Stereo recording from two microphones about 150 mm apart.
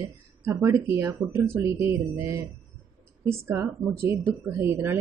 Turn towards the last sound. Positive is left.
turn(degrees=-15)  # may be behind; listen again after turning